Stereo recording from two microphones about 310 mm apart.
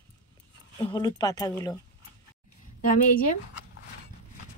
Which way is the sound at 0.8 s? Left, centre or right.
Centre.